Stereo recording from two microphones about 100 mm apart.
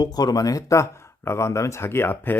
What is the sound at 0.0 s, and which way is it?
Speech, 40° left (ahead or behind).